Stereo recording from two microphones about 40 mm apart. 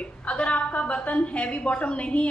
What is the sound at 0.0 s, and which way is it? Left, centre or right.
A woman's voice, left.